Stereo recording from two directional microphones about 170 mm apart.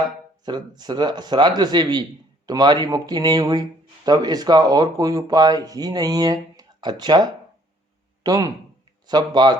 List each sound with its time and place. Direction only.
0.4 s a man's voice: 25° right (ahead or behind)